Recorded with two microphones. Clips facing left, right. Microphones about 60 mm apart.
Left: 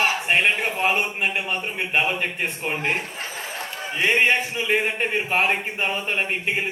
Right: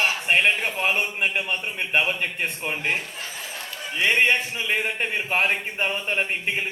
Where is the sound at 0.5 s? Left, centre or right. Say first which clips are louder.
Left 2 dB; left.